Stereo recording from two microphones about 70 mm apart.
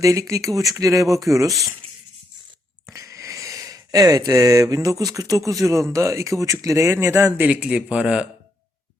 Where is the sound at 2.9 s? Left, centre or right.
Right.